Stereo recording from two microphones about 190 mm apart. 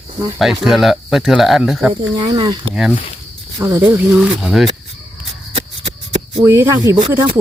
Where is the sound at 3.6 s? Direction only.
15° right (ahead or behind).